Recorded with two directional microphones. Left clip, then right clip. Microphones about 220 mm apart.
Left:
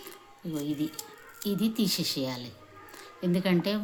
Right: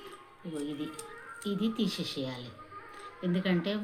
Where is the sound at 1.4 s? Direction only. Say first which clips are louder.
Left 3 dB; 55° left (ahead or behind).